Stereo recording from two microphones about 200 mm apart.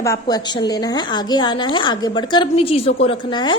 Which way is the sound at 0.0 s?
15° left (ahead or behind).